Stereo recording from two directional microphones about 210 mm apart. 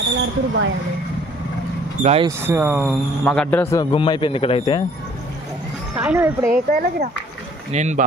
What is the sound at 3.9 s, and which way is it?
Speech, 25° left (ahead or behind).